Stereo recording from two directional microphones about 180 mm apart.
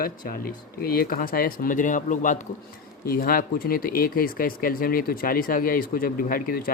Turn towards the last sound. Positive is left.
turn(degrees=50)  # may be behind; listen again after turning